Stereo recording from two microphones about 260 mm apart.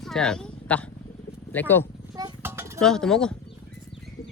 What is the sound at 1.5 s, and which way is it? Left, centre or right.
Speech, centre.